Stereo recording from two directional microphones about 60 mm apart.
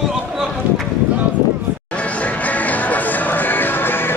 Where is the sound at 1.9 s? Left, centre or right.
Left.